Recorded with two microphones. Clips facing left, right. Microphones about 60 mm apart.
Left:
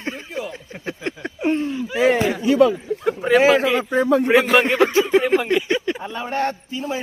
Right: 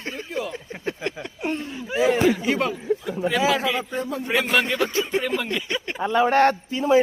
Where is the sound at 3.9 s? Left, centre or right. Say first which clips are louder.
Left 11 dB; left.